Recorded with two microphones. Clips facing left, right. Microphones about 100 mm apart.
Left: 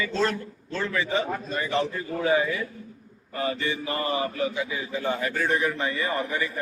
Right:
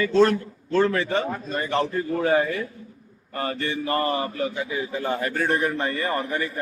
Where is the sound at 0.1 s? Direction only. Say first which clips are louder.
Right 8 dB; 50° right (ahead or behind).